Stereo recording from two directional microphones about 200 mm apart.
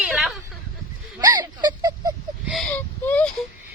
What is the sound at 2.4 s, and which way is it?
Speech, centre (ahead or behind).